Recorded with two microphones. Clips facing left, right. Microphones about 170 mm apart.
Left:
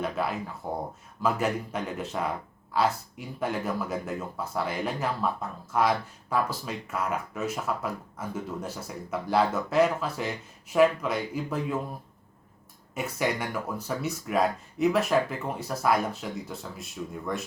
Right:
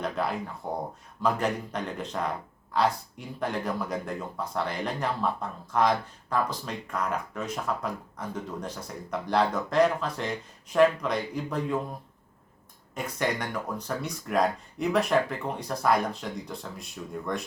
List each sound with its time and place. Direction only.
0.0 s speech: 5° left (ahead or behind)
12.9 s speech: 5° left (ahead or behind)